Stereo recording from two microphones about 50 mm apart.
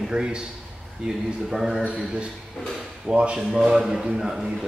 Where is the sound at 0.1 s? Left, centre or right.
Centre.